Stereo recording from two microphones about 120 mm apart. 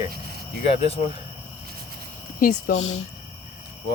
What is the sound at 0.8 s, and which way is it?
Speech, 55° left (ahead or behind).